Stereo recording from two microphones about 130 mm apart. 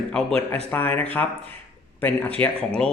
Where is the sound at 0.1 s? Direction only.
5° left (ahead or behind).